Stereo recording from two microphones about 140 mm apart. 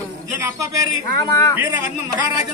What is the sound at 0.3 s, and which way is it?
Speech, 25° right (ahead or behind).